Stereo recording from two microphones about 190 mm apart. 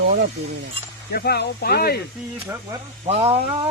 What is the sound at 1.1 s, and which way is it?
Speech, 55° left (ahead or behind).